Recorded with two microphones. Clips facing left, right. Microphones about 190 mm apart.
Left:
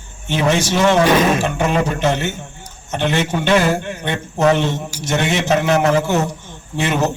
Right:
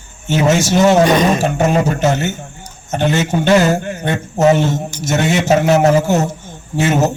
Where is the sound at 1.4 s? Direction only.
45° right (ahead or behind).